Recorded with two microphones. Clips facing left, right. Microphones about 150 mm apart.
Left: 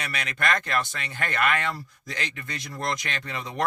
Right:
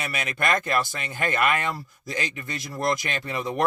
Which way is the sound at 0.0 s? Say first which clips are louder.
Right 2 dB; 10° right (ahead or behind).